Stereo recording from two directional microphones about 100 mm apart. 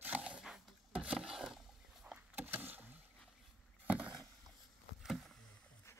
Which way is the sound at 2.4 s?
20° right (ahead or behind).